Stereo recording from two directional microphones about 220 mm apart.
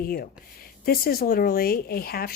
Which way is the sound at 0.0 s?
40° left (ahead or behind).